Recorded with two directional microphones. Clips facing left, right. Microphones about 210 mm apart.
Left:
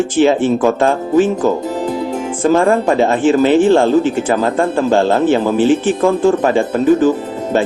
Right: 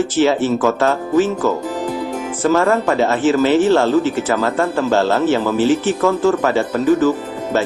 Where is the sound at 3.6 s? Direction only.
50° left (ahead or behind).